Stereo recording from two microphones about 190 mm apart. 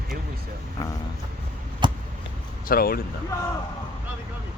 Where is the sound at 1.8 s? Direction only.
25° right (ahead or behind).